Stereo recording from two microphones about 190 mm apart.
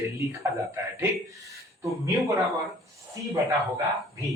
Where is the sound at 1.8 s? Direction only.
15° right (ahead or behind).